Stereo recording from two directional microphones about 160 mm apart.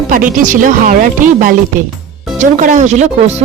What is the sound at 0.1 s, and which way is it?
Speech, 55° right (ahead or behind).